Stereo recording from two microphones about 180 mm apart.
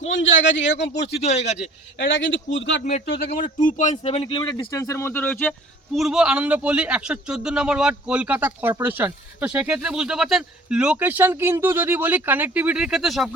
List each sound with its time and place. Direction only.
0.0 s a man's voice: 90° left
2.0 s a man's voice: 90° left
2.9 s a man's voice: 45° left (ahead or behind); by 13.3 s centre (ahead or behind)